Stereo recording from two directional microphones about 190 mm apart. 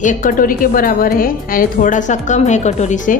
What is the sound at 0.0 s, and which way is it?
A woman's voice, 45° left (ahead or behind).